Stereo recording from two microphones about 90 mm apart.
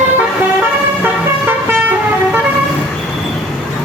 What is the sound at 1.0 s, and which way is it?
Vehicle, 20° right (ahead or behind).